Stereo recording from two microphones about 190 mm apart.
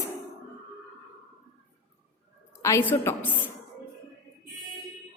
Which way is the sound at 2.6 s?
15° left (ahead or behind).